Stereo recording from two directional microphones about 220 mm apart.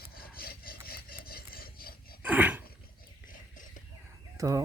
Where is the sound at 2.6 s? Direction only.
40° left (ahead or behind).